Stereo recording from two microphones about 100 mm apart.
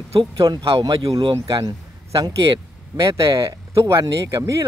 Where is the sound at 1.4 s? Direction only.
35° right (ahead or behind).